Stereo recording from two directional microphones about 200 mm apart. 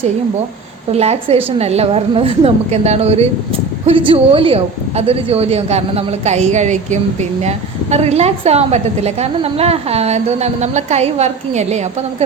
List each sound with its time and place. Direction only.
0.9 s a woman's voice: 30° right (ahead or behind)